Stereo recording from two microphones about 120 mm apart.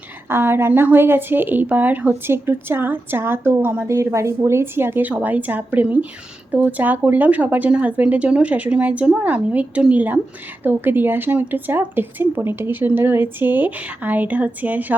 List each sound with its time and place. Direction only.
0.3 s a woman's voice: 20° right (ahead or behind)